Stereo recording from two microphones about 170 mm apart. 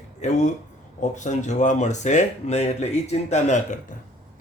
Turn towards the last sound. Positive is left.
turn(degrees=45)  # may be behind; listen again after turning